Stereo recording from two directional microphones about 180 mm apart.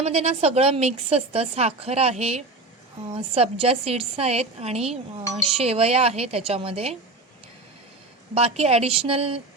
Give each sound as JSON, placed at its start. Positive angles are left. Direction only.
{"t": 0.0, "sound": "a woman's voice", "side_deg": -35}
{"t": 8.4, "sound": "a woman's voice", "side_deg": -35}